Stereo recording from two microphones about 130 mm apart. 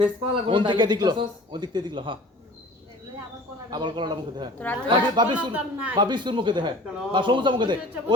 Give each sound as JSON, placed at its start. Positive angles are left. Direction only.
{"t": 0.0, "sound": "a man's voice", "side_deg": -40}
{"t": 3.7, "sound": "a man's voice", "side_deg": -35}
{"t": 5.5, "sound": "speech", "side_deg": -10}
{"t": 6.0, "sound": "a man's voice", "side_deg": -35}